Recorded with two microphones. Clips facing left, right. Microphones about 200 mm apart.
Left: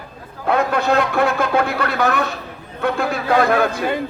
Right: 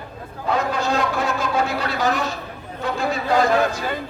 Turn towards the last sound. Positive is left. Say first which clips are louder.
# left 2 dB
turn(degrees=60)  # may be behind; listen again after turning